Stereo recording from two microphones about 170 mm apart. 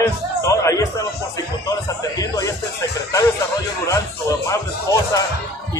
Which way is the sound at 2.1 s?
20° left (ahead or behind).